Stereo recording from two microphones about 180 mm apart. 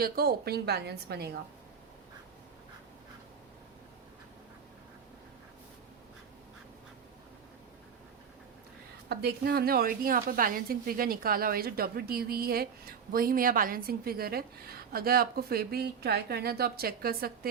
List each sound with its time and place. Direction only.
0.0 s a woman's voice: 60° right (ahead or behind)
9.0 s a woman's voice: 60° right (ahead or behind)